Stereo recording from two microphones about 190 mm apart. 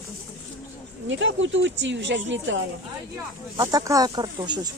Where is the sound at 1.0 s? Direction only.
80° right.